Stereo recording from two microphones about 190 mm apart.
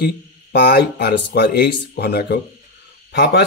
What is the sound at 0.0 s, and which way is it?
Speech, 60° left (ahead or behind).